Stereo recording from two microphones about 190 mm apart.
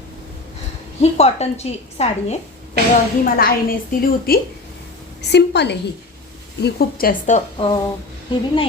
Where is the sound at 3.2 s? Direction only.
50° left (ahead or behind).